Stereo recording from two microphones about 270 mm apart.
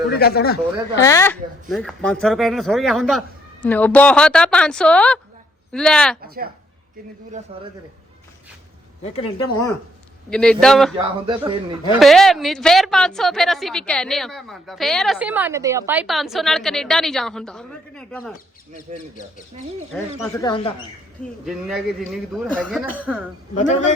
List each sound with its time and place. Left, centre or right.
0.1 s speech: left
0.9 s speech: centre
6.2 s speech: right
7.5 s speech: right
9.0 s speech: left
10.2 s speech: centre
10.9 s speech: centre
11.9 s speech: centre
19.9 s speech: centre
20.4 s speech: centre
21.4 s speech: centre
23.6 s a man's voice: left